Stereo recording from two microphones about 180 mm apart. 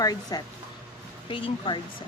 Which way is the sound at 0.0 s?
20° left (ahead or behind).